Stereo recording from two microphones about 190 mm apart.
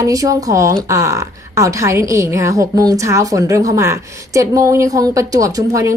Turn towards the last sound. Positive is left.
turn(degrees=-15)  # may be behind; listen again after turning